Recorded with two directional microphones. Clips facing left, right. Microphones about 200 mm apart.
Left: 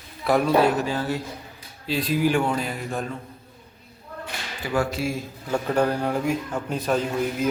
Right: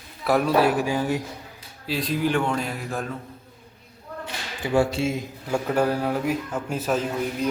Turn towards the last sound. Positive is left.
turn(degrees=0)  # may be behind; listen again after turning